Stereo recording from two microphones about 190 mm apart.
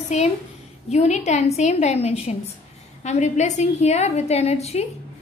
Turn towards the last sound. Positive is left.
turn(degrees=35)  # may be behind; listen again after turning